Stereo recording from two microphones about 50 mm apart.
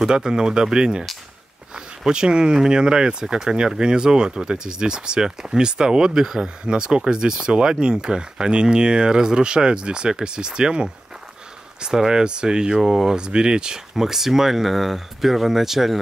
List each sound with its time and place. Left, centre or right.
0.0 s speech: centre
2.0 s speech: centre